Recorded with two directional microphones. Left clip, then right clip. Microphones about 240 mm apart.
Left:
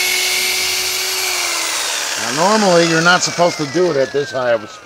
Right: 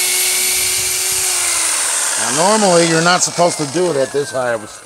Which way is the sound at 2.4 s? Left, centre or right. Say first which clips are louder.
Even; centre.